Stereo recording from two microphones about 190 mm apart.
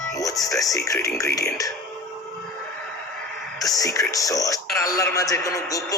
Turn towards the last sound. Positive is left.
turn(degrees=15)  # may be behind; listen again after turning